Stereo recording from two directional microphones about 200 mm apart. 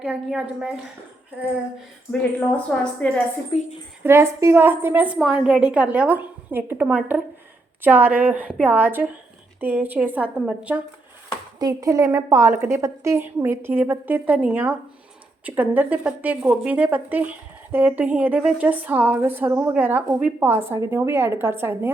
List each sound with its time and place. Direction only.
0.0 s a woman's voice: 5° right (ahead or behind)
2.7 s a woman's voice: 5° left (ahead or behind)
3.5 s speech: 25° left (ahead or behind)
4.0 s speech: 10° right (ahead or behind)